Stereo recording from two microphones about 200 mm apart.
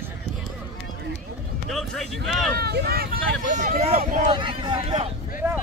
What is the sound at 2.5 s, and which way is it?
Speech, 50° right (ahead or behind).